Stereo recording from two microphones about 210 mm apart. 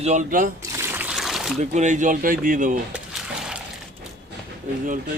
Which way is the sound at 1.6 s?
35° right (ahead or behind).